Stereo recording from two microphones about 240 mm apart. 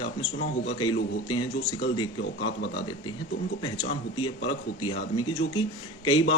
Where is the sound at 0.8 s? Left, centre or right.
Centre.